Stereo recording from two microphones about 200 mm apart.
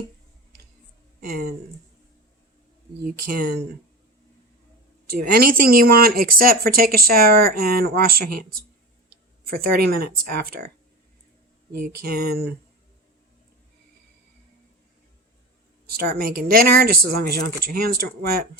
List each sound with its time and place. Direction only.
1.2 s speech: 50° right (ahead or behind)
3.0 s speech: 45° right (ahead or behind)
5.0 s speech: 50° right (ahead or behind)
11.8 s speech: 50° right (ahead or behind)
15.9 s speech: 50° right (ahead or behind)